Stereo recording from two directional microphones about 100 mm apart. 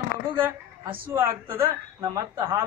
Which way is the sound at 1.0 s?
25° right (ahead or behind).